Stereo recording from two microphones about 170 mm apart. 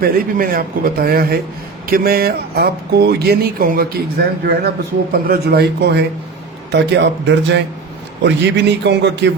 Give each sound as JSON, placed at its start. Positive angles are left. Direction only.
{"t": 0.0, "sound": "a man's voice", "side_deg": -60}
{"t": 6.7, "sound": "a man's voice", "side_deg": -90}